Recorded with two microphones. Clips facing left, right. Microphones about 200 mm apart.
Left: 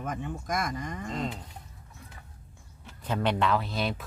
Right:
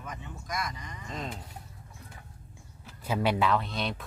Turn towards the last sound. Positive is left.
turn(degrees=5)  # may be behind; listen again after turning